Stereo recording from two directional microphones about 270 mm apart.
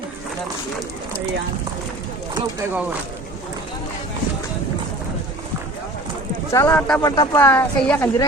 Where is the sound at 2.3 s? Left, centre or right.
Centre.